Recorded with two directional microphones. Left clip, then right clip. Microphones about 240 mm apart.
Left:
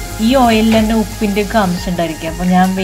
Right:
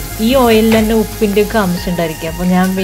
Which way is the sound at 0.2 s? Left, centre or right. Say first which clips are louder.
Right 1 dB; right.